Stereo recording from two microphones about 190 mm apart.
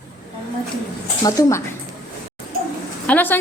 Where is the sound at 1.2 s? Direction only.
15° left (ahead or behind).